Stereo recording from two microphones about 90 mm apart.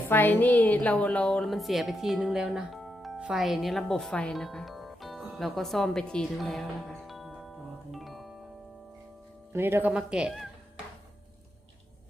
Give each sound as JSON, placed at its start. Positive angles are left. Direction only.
{"t": 0.1, "sound": "a woman's voice", "side_deg": 20}
{"t": 1.5, "sound": "speech", "side_deg": 0}
{"t": 3.2, "sound": "music", "side_deg": -10}
{"t": 3.4, "sound": "music", "side_deg": 0}
{"t": 9.5, "sound": "speech", "side_deg": -25}
{"t": 9.9, "sound": "speech", "side_deg": -10}